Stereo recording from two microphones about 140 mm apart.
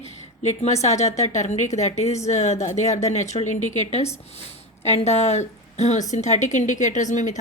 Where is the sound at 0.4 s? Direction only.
50° left (ahead or behind).